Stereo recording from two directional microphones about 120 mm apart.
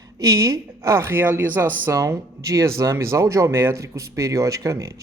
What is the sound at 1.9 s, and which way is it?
Speech, 25° right (ahead or behind).